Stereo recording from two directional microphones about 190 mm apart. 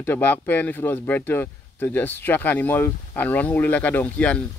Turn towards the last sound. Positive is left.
turn(degrees=5)  # may be behind; listen again after turning